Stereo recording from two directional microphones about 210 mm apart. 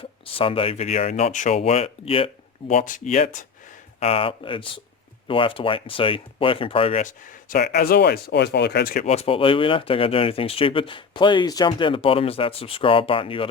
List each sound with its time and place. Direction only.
0.3 s speech: 25° left (ahead or behind)
4.0 s speech: 25° left (ahead or behind); by 9.0 s 45° left (ahead or behind)
9.0 s speech: 30° left (ahead or behind)